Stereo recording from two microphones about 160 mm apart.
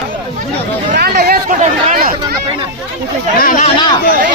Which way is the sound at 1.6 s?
60° right (ahead or behind).